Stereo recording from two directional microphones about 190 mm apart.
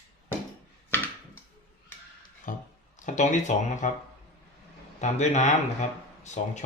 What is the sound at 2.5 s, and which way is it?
Music, 45° left (ahead or behind).